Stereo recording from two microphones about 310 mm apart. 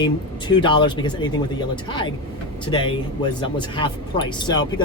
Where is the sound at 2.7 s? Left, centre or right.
Centre.